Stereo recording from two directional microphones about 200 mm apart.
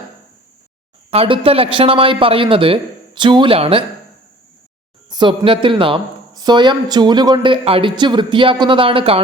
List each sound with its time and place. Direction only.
1.1 s speech: 30° right (ahead or behind)
5.0 s speech: 20° right (ahead or behind)